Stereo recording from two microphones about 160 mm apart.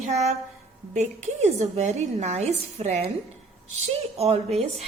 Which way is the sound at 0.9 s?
45° right (ahead or behind).